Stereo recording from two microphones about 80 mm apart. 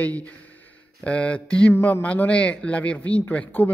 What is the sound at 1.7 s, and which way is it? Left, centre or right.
A man's voice, left.